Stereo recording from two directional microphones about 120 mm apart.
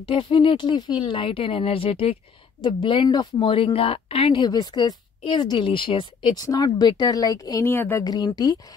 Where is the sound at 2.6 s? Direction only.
40° left (ahead or behind).